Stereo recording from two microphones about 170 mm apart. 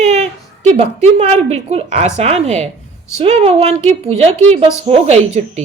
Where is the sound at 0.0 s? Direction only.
40° right (ahead or behind).